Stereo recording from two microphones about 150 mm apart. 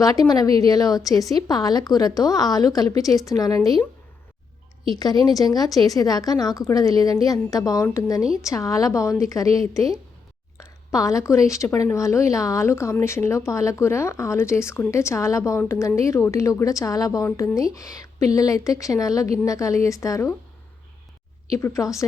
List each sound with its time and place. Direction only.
0.0 s speech: 25° left (ahead or behind)
4.9 s speech: 25° left (ahead or behind)
21.5 s speech: 20° left (ahead or behind)